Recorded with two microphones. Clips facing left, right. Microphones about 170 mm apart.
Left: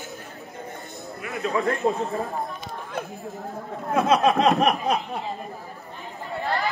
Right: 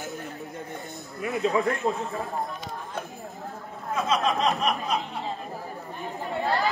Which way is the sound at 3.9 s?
65° left (ahead or behind).